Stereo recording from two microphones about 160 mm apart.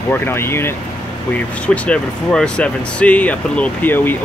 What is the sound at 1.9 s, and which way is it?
Speech, 5° left (ahead or behind).